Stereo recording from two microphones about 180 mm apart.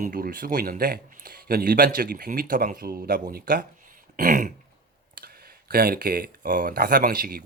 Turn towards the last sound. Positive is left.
turn(degrees=-55)  # may be behind; listen again after turning